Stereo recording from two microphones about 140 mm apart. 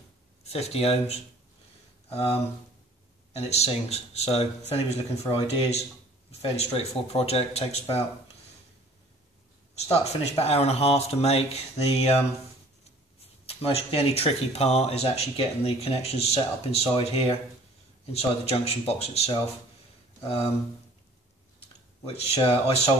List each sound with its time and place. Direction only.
0.4 s speech: 50° left (ahead or behind)
3.3 s speech: 50° left (ahead or behind)
9.8 s speech: 45° left (ahead or behind)
13.5 s speech: 45° left (ahead or behind)
21.5 s speech: 45° left (ahead or behind)